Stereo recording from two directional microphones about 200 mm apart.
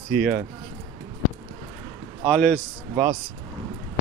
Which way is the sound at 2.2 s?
5° left (ahead or behind).